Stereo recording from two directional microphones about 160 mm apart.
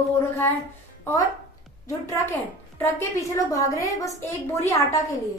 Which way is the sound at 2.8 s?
20° left (ahead or behind).